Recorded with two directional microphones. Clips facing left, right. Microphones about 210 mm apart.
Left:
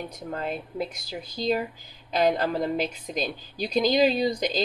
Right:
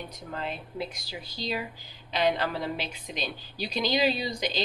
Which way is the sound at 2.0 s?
45° left (ahead or behind).